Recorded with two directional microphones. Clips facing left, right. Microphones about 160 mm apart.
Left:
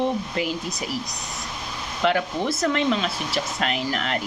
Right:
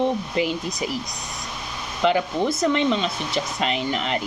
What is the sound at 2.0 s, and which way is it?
Speech, centre (ahead or behind).